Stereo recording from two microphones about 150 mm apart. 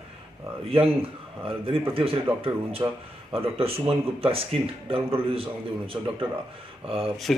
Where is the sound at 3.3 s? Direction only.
40° right (ahead or behind).